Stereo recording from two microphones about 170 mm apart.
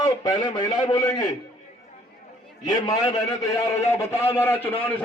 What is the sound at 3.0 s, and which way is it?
A man's voice, 20° left (ahead or behind).